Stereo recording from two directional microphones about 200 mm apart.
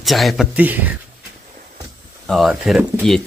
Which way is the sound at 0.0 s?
Centre (ahead or behind).